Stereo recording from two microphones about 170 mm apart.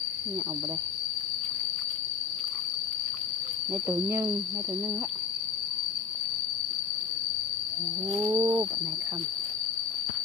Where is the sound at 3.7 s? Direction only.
15° right (ahead or behind).